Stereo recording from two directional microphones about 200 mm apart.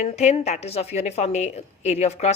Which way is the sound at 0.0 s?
35° left (ahead or behind).